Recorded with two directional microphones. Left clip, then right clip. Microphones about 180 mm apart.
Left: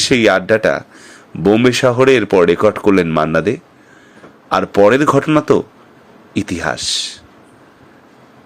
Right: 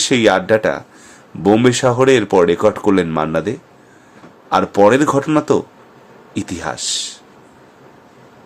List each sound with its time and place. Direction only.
0.0 s speech: 10° left (ahead or behind)